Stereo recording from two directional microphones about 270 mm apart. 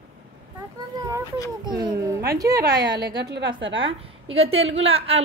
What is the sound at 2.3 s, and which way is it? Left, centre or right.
A woman's voice, centre.